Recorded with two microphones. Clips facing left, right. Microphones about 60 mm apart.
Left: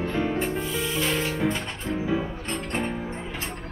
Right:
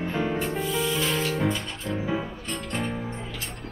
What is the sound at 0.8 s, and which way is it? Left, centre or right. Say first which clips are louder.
Music: even; left.